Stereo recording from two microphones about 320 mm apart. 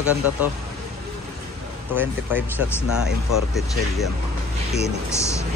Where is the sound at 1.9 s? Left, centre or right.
Centre.